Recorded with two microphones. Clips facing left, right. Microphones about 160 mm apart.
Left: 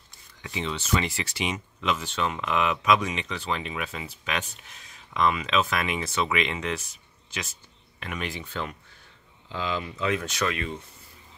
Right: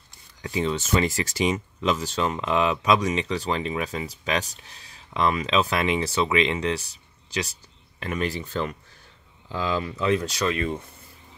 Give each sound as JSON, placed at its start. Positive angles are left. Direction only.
{"t": 0.4, "sound": "speech", "side_deg": -40}